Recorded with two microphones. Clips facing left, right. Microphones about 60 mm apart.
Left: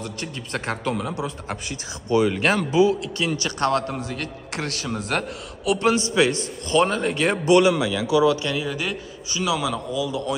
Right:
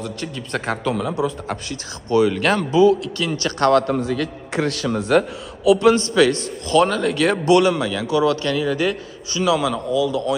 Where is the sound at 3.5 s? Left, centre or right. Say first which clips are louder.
Right 8 dB; right.